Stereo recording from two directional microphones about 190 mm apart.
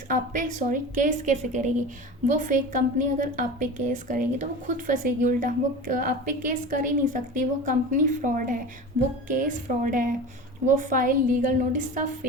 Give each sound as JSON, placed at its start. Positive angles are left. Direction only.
{"t": 0.1, "sound": "a woman's voice", "side_deg": -45}